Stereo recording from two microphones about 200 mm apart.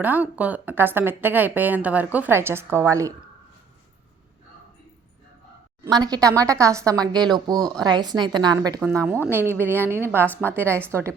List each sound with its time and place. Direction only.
0.0 s a woman's voice: 10° right (ahead or behind)
5.8 s a woman's voice: 20° right (ahead or behind)